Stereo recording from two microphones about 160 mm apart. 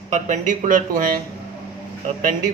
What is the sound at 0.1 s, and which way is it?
Speech, 50° right (ahead or behind).